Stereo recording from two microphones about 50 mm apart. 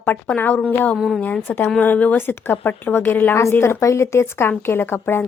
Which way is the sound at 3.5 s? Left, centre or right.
Left.